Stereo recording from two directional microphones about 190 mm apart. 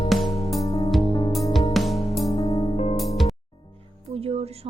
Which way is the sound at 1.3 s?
Centre (ahead or behind).